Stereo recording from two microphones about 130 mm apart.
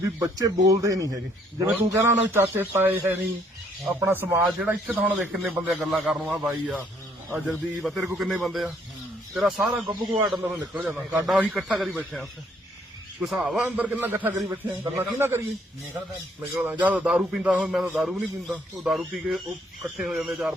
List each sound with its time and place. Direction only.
0.0 s a man's voice: 25° right (ahead or behind); by 6.8 s 10° right (ahead or behind)
7.4 s a man's voice: centre (ahead or behind)
9.8 s a man's voice: 35° right (ahead or behind)
10.2 s a man's voice: centre (ahead or behind)
10.4 s a man's voice: 15° right (ahead or behind)
13.2 s a man's voice: centre (ahead or behind)
13.7 s speech: 10° right (ahead or behind)
16.6 s a man's voice: 15° right (ahead or behind)